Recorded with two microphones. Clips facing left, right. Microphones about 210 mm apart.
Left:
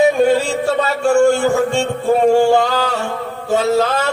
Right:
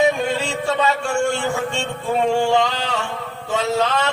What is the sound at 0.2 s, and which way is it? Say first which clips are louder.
Music: left 9 dB; 40° left (ahead or behind).